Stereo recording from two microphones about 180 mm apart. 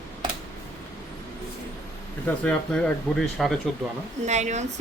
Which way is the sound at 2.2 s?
5° left (ahead or behind).